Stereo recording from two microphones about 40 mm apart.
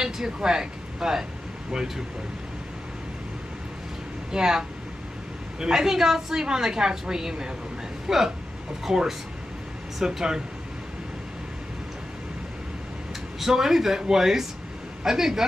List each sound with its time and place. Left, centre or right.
0.0 s a woman's voice: centre
4.3 s a woman's voice: centre
13.4 s a woman's voice: centre